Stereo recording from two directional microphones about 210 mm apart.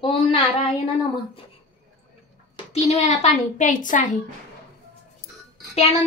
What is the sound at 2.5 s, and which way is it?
A woman's voice, 30° left (ahead or behind).